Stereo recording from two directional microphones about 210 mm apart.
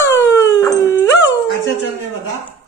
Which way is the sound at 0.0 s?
15° left (ahead or behind).